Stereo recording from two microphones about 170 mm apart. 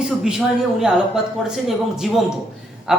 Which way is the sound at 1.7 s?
Centre (ahead or behind).